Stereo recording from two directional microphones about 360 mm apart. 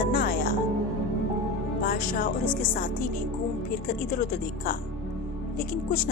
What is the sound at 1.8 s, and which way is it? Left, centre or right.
Speech, left.